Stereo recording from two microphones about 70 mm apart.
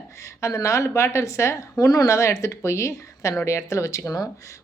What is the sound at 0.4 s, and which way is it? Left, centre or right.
Speech, left.